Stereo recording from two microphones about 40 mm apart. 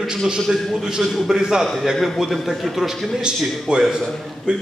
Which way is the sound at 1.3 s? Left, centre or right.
Centre.